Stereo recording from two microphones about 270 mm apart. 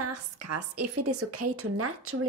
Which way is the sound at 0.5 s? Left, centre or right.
Right.